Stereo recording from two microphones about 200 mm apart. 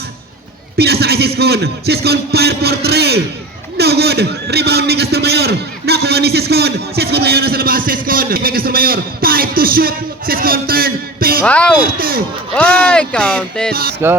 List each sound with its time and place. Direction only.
0.8 s a man's voice: 50° right (ahead or behind)
11.4 s speech: 5° left (ahead or behind)
11.8 s a man's voice: 45° right (ahead or behind)
12.5 s speech: 5° left (ahead or behind)
14.0 s speech: 10° right (ahead or behind)